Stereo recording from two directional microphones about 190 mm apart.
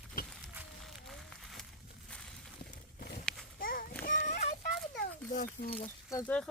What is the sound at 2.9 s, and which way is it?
Horse, 55° left (ahead or behind).